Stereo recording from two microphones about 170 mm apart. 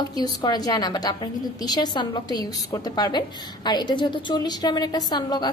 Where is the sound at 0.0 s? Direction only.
25° left (ahead or behind).